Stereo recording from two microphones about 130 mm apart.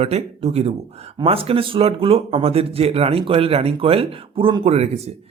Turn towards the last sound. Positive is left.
turn(degrees=-55)  # may be behind; listen again after turning